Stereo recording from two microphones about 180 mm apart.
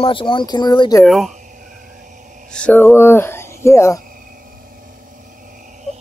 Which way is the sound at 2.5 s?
10° left (ahead or behind).